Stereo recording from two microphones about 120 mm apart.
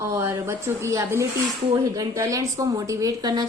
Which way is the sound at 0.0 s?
20° right (ahead or behind).